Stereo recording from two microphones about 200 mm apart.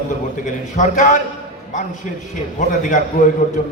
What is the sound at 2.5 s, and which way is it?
A man's voice, 40° left (ahead or behind).